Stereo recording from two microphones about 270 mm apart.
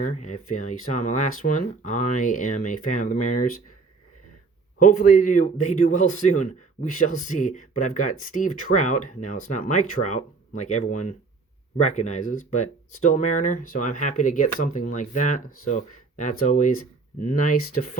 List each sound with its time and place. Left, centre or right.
0.0 s speech: left
4.8 s speech: left